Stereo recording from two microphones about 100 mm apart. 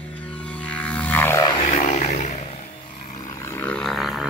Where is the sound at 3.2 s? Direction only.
30° left (ahead or behind).